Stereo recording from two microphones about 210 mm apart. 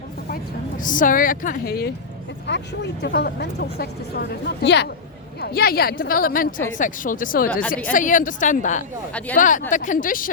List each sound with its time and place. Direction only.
0.8 s a woman's voice: 40° left (ahead or behind)
3.0 s a woman's voice: 50° left (ahead or behind)